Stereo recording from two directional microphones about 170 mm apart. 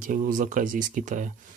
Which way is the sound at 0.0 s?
50° right (ahead or behind).